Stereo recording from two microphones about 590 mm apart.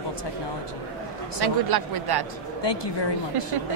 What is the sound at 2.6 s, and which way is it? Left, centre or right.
Speech, left.